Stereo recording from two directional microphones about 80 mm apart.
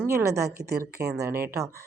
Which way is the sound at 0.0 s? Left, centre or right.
Right.